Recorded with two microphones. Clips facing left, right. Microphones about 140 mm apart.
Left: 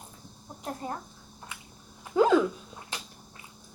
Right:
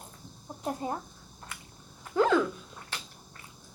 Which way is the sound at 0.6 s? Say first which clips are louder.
Right 3 dB; 15° right (ahead or behind).